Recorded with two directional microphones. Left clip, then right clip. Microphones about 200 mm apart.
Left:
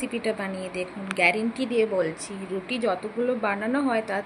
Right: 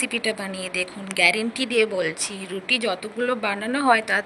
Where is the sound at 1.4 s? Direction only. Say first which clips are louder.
Right 3 dB; 65° right (ahead or behind).